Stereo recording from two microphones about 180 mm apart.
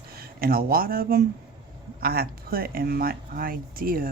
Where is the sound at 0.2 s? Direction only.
55° right (ahead or behind).